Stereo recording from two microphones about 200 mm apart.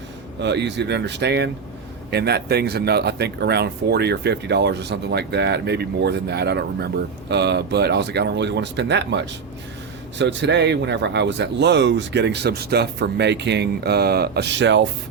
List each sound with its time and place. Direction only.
0.4 s a man's voice: 60° right (ahead or behind)